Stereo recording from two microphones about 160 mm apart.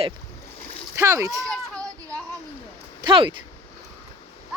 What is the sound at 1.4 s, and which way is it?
Children playing, centre (ahead or behind).